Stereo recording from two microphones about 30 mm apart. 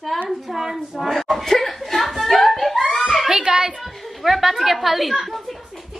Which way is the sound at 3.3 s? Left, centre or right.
Right.